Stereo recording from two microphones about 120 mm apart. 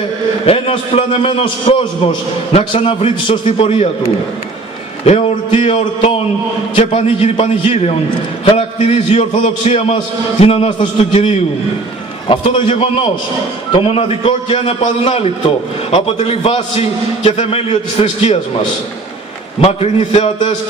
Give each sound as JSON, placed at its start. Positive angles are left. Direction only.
{"t": 0.5, "sound": "a man's voice", "side_deg": 50}
{"t": 5.0, "sound": "a man's voice", "side_deg": 60}
{"t": 12.3, "sound": "a man's voice", "side_deg": 50}
{"t": 15.9, "sound": "a man's voice", "side_deg": 55}
{"t": 19.6, "sound": "a man's voice", "side_deg": 60}